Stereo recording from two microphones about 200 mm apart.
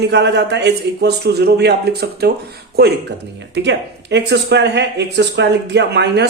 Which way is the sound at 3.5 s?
60° right (ahead or behind).